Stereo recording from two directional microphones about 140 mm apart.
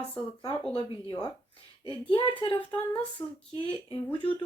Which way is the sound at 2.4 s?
35° left (ahead or behind).